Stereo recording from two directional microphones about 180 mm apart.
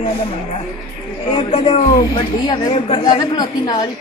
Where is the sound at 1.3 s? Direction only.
30° left (ahead or behind).